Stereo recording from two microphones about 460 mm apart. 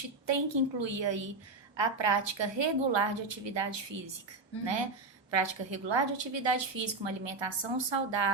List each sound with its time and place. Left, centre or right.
0.3 s a woman's voice: right